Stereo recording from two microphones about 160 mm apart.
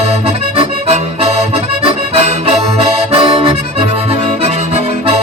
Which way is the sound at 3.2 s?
35° right (ahead or behind).